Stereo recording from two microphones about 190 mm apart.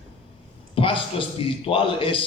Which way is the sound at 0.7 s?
30° left (ahead or behind).